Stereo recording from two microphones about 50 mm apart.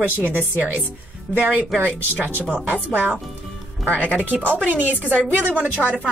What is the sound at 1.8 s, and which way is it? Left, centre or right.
A woman's voice, right.